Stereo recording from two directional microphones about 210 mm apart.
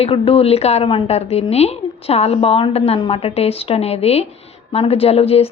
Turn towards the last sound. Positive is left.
turn(degrees=30)  # may be behind; listen again after turning